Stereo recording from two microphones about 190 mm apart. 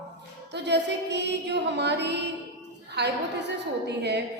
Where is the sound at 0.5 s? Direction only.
65° right (ahead or behind).